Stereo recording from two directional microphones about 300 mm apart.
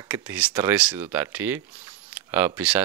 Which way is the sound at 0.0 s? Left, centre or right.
Centre.